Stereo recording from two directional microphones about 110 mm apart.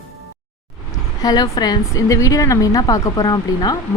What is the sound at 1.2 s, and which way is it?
A woman's voice, 40° left (ahead or behind).